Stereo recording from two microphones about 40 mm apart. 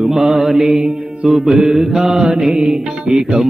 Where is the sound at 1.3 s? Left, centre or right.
Centre.